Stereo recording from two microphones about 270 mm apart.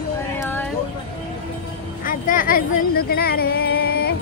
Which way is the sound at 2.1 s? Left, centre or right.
Left.